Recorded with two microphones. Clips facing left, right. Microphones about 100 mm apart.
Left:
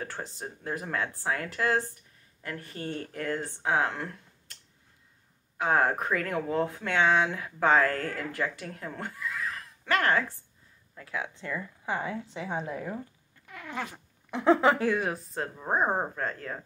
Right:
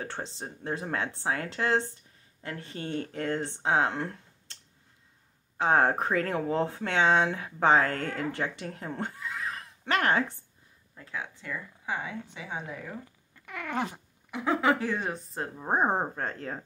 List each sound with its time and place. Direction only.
0.0 s speech: 25° right (ahead or behind)
5.6 s speech: 30° right (ahead or behind)
11.1 s speech: 15° left (ahead or behind)
13.5 s cat: 70° right (ahead or behind)
14.3 s speech: 25° left (ahead or behind)
14.9 s a woman's voice: 5° left (ahead or behind)
15.5 s speech: 15° right (ahead or behind)